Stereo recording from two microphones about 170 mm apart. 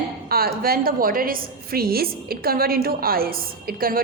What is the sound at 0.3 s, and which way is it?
A woman's voice, 60° right (ahead or behind).